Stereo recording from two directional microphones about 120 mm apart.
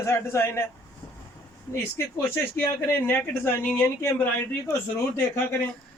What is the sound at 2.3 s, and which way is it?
Speech, 15° left (ahead or behind).